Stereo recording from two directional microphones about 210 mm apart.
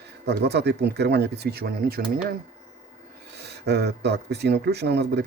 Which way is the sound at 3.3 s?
50° right (ahead or behind).